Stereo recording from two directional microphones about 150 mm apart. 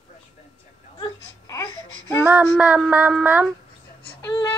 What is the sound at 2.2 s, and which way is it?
Child singing, 10° right (ahead or behind).